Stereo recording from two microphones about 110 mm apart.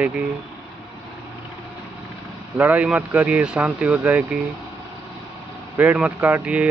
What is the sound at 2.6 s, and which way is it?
A man's voice, 15° right (ahead or behind).